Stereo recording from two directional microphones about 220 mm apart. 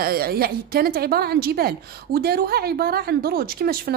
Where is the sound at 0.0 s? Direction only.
45° right (ahead or behind).